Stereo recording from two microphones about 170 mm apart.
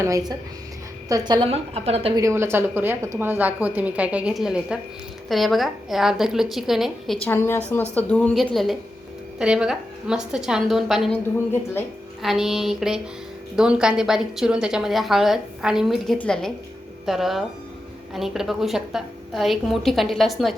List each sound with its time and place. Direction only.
0.0 s a woman's voice: 20° right (ahead or behind); by 2.1 s 35° right (ahead or behind)
2.1 s a woman's voice: 15° right (ahead or behind)
7.3 s a woman's voice: 15° left (ahead or behind)
12.2 s a woman's voice: centre (ahead or behind)